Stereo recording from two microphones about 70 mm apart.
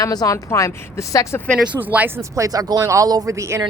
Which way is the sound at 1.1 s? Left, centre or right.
Left.